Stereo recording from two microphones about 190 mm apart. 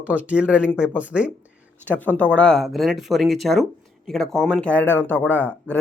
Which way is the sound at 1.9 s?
10° left (ahead or behind).